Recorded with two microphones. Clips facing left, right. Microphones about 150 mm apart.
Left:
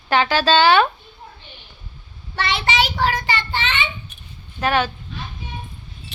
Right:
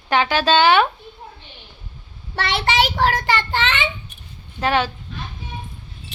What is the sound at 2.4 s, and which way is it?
Speech, 60° right (ahead or behind).